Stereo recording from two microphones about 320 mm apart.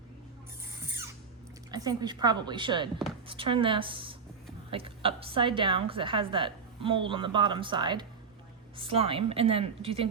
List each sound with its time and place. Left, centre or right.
1.7 s a woman's voice: centre